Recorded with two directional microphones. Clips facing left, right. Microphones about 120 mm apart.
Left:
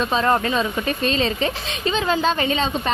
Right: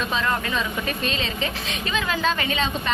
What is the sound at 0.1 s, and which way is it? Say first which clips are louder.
A woman's voice: left 6 dB; 40° left (ahead or behind).